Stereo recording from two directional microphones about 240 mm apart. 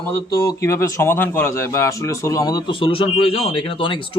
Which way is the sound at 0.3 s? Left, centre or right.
Centre.